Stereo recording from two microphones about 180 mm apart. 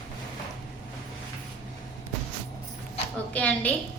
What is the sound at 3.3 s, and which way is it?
Speech, 10° left (ahead or behind).